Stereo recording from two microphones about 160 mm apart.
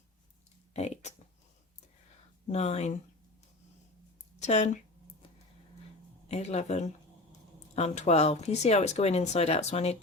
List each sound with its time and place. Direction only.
0.7 s speech: 45° left (ahead or behind)
2.5 s speech: 45° left (ahead or behind)
4.4 s a woman's voice: 45° left (ahead or behind)
6.2 s speech: 45° left (ahead or behind)